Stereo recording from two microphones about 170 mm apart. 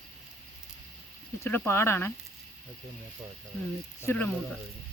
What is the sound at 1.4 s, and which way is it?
Speech, 15° left (ahead or behind).